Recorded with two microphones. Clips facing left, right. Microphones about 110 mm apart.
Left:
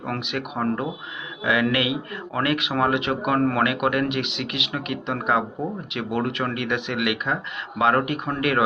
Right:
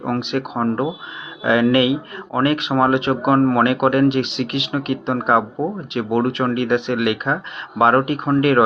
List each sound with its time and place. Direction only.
0.0 s speech: 30° right (ahead or behind)